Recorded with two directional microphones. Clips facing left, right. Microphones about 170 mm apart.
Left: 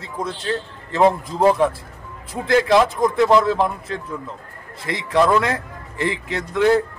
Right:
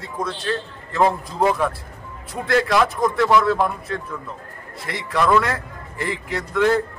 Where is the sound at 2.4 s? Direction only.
25° left (ahead or behind).